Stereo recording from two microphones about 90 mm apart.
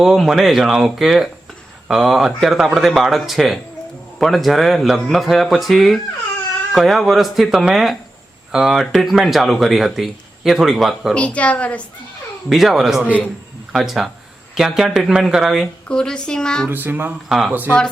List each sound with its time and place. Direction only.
0.0 s speech: 5° right (ahead or behind)
11.1 s speech: 15° left (ahead or behind)
12.5 s speech: centre (ahead or behind)
15.9 s speech: 10° left (ahead or behind)
16.6 s speech: 20° right (ahead or behind)
17.2 s speech: centre (ahead or behind)
17.5 s speech: 20° right (ahead or behind)